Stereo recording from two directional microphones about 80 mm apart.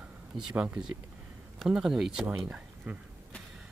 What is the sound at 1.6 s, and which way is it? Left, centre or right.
Speech, centre.